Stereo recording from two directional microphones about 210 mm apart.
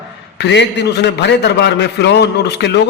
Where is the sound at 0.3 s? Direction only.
55° left (ahead or behind).